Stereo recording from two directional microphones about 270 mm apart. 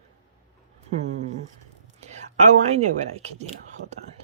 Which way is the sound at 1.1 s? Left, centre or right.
Right.